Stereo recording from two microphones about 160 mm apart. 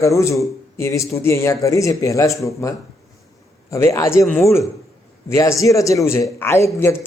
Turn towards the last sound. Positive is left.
turn(degrees=15)  # may be behind; listen again after turning